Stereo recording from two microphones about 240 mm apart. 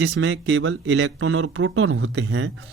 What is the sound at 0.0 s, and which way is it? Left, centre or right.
Speech, right.